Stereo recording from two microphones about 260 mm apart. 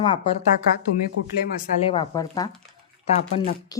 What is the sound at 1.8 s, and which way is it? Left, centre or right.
Speech, centre.